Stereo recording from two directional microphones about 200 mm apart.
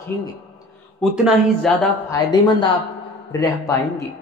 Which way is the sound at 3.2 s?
15° left (ahead or behind).